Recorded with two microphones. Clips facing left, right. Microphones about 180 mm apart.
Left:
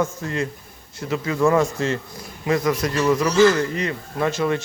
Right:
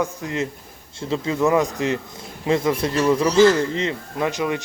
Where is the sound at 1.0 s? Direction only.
25° right (ahead or behind).